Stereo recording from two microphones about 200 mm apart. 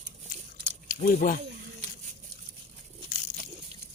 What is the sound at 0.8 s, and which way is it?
Speech, 45° left (ahead or behind).